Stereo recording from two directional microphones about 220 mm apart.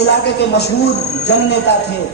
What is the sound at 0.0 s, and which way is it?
Speech, 50° left (ahead or behind).